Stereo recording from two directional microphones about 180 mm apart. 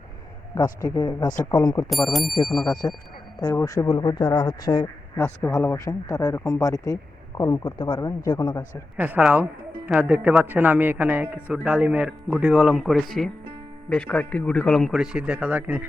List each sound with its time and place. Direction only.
0.5 s a man's voice: 15° left (ahead or behind)
1.9 s speech: centre (ahead or behind)
2.8 s a man's voice: 15° left (ahead or behind)
7.9 s speech: 30° left (ahead or behind)
9.0 s speech: 10° right (ahead or behind)